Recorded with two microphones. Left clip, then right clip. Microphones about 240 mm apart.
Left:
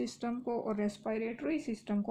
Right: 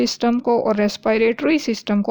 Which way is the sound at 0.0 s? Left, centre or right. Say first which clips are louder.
Right 18 dB; right.